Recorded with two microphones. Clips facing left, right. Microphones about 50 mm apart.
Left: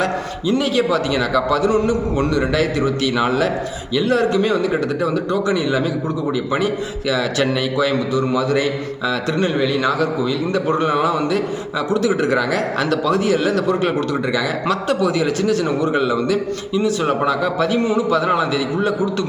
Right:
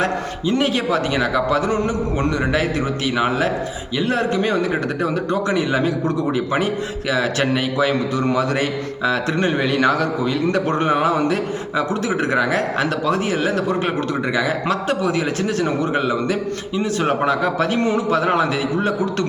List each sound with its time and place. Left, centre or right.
0.0 s speech: right
9.6 s a man's voice: right